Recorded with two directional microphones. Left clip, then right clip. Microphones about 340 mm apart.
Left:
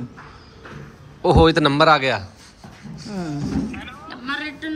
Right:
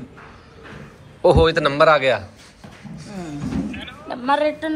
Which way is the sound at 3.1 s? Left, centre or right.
Left.